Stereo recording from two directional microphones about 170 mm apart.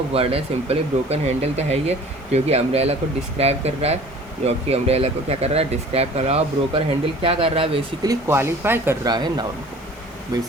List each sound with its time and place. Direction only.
0.1 s speech: 35° right (ahead or behind)
8.0 s speech: 15° right (ahead or behind)
9.1 s speech: 25° right (ahead or behind)